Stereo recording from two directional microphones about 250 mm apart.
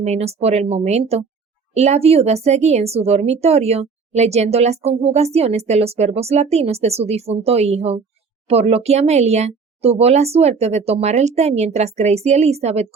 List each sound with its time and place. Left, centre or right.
0.0 s speech: right